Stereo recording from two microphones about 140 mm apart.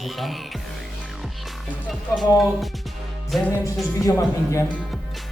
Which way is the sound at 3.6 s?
20° left (ahead or behind).